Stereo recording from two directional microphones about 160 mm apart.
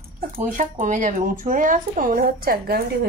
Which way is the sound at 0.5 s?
50° right (ahead or behind).